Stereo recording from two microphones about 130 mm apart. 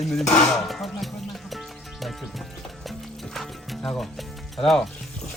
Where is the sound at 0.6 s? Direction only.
Centre (ahead or behind).